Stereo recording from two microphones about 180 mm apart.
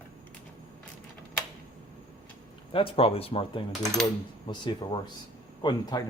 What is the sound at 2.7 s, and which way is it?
Speech, 30° left (ahead or behind).